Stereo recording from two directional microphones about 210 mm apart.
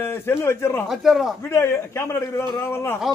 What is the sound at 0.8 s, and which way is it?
Speech, centre (ahead or behind).